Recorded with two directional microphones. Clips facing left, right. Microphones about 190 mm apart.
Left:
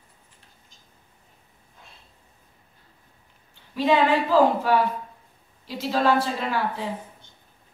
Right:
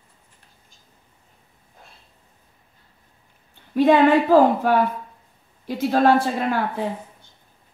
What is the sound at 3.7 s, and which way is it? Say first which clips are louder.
A woman's voice: right 6 dB; 50° right (ahead or behind).